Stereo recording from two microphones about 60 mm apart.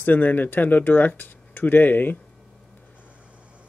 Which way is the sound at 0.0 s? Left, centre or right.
Left.